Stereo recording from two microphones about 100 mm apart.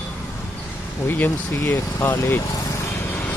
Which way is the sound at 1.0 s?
20° left (ahead or behind).